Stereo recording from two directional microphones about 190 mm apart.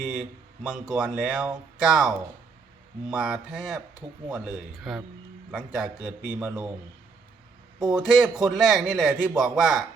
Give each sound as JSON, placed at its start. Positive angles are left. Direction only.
{"t": 0.1, "sound": "a man's voice", "side_deg": -5}
{"t": 7.8, "sound": "speech", "side_deg": -20}
{"t": 8.0, "sound": "a man's voice", "side_deg": 0}